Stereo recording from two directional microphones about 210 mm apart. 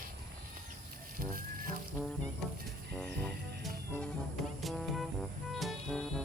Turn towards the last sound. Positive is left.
turn(degrees=0)  # may be behind; listen again after turning